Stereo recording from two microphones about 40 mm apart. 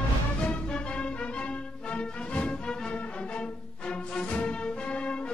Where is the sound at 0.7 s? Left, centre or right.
Left.